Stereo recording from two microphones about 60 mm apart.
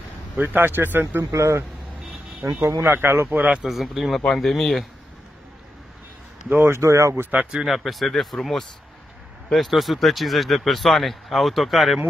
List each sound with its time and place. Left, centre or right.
0.4 s speech: right
1.3 s speech: right
2.8 s speech: right
3.6 s speech: centre
6.5 s speech: right
6.8 s speech: right
7.6 s speech: centre